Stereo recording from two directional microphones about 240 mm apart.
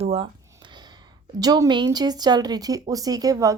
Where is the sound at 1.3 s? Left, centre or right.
Centre.